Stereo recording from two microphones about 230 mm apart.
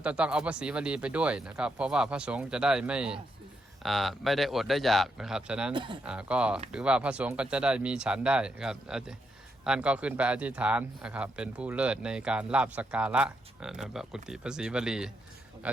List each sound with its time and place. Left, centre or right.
0.0 s speech: centre
5.7 s speech: centre
6.0 s speech: centre